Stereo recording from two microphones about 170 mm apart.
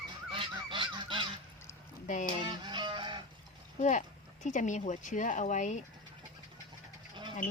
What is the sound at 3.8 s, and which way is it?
Speech, 45° left (ahead or behind).